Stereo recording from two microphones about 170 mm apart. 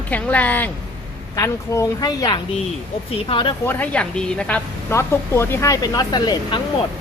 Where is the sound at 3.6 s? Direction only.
10° left (ahead or behind); by 6.6 s 25° left (ahead or behind).